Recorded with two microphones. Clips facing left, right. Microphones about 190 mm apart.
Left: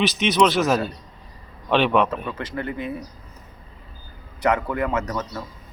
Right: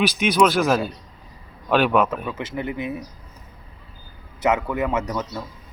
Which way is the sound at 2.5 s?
15° right (ahead or behind).